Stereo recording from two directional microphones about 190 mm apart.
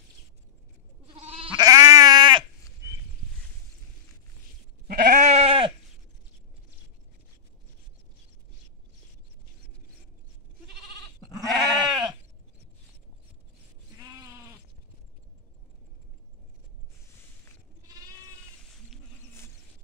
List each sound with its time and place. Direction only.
1.0 s goat: 30° right (ahead or behind)
1.7 s sheep: 15° right (ahead or behind)
4.8 s goat: 55° right (ahead or behind)
5.2 s goat: 35° right (ahead or behind)
11.1 s goat: 20° left (ahead or behind)
11.4 s goat: centre (ahead or behind)
13.9 s goat: 15° right (ahead or behind)